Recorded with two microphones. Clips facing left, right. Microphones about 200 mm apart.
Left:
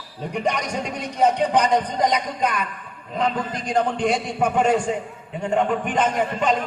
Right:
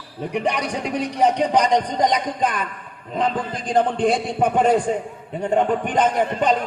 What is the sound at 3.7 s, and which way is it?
A man's voice, 30° right (ahead or behind).